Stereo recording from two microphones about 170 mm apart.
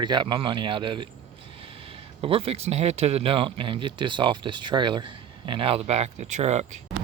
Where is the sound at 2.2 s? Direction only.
35° right (ahead or behind).